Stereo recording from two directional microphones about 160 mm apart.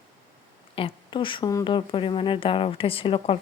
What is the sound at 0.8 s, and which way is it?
A woman's voice, 30° left (ahead or behind).